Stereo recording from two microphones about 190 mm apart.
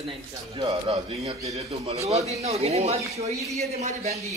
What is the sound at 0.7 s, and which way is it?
A man's voice, 30° right (ahead or behind).